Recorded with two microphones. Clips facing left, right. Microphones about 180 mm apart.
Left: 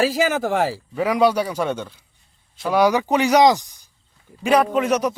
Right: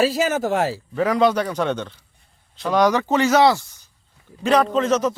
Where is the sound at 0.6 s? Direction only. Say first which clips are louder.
Even; 10° left (ahead or behind).